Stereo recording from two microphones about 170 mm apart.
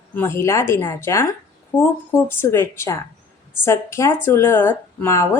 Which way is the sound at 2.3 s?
15° left (ahead or behind).